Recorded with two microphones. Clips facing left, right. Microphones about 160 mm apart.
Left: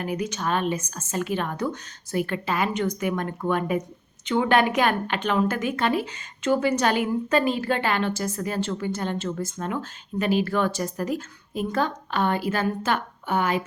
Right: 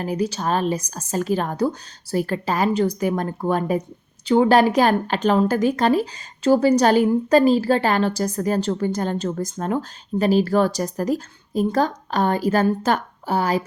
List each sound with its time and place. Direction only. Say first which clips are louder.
0.0 s a woman's voice: right 4 dB; 35° right (ahead or behind)